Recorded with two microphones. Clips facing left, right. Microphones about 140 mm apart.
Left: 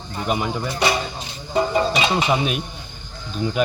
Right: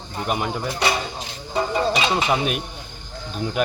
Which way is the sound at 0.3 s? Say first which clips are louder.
Left 1 dB; 5° right (ahead or behind).